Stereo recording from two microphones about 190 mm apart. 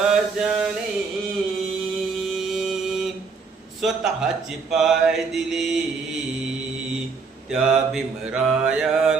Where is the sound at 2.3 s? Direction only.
Centre (ahead or behind).